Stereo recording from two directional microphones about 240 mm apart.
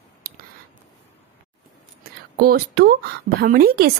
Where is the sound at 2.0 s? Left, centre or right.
Right.